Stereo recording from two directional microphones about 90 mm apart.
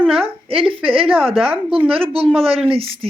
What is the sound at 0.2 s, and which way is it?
A woman's voice, 85° right.